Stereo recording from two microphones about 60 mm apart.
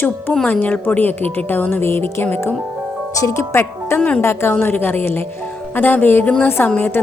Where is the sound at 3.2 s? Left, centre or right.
Left.